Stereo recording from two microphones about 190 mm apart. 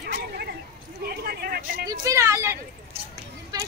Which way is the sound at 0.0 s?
55° right (ahead or behind).